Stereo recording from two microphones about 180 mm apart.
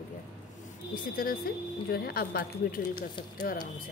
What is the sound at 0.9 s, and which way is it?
A woman's voice, 50° left (ahead or behind).